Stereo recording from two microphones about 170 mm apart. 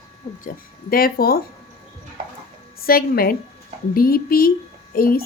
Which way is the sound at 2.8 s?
60° left (ahead or behind).